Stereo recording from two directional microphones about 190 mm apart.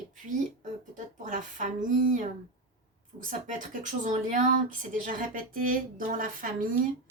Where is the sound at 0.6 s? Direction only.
40° right (ahead or behind).